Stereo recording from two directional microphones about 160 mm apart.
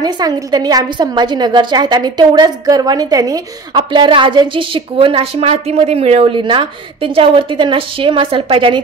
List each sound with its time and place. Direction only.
0.0 s a woman's voice: 25° right (ahead or behind)